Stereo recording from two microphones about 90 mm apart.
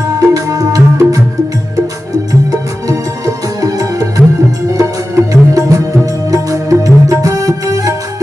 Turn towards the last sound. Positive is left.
turn(degrees=-40)  # may be behind; listen again after turning